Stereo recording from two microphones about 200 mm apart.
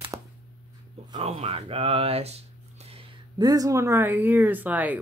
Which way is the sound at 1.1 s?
30° right (ahead or behind).